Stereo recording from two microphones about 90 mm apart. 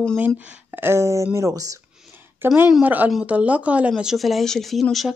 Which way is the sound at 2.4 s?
25° right (ahead or behind).